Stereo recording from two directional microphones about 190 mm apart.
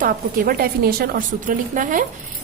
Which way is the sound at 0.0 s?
50° right (ahead or behind).